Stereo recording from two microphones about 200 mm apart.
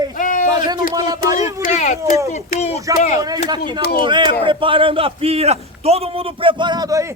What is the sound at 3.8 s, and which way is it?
Speech, 55° left (ahead or behind).